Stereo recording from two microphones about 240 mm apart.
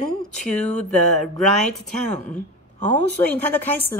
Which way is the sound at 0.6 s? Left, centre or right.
Left.